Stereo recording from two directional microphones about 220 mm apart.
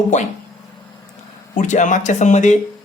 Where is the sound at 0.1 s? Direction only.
35° left (ahead or behind).